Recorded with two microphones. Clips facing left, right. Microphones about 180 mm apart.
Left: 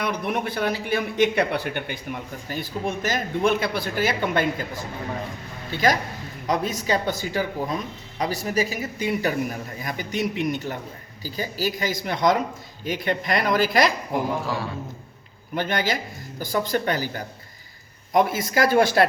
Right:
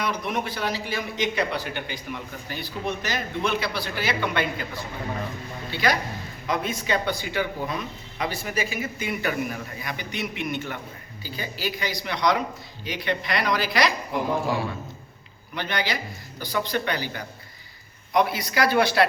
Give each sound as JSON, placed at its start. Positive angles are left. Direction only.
{"t": 0.0, "sound": "a man's voice", "side_deg": 55}
{"t": 15.5, "sound": "speech", "side_deg": 45}